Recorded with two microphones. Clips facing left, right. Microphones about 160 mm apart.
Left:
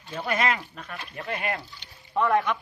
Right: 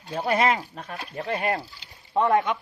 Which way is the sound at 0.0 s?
40° right (ahead or behind).